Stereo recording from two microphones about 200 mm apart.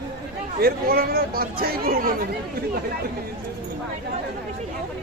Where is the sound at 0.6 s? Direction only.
50° right (ahead or behind).